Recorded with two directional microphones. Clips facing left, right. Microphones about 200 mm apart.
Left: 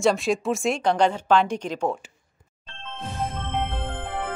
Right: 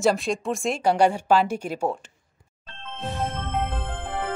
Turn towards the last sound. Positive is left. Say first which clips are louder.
# even
turn(degrees=0)  # may be behind; listen again after turning